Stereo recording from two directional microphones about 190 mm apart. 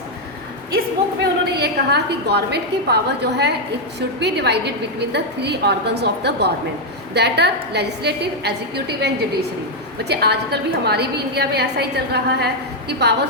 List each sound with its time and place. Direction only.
1.2 s a woman's voice: 60° right (ahead or behind)